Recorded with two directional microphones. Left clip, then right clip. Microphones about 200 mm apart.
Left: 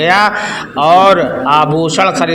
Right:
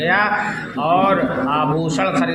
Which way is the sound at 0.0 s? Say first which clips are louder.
Left 6 dB; 40° left (ahead or behind).